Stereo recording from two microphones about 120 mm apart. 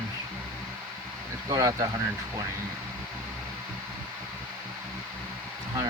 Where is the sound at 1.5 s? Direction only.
30° right (ahead or behind).